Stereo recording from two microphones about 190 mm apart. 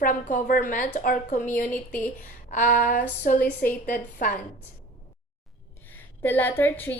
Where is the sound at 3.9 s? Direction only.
50° left (ahead or behind).